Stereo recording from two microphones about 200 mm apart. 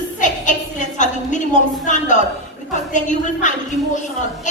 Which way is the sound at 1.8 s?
40° left (ahead or behind).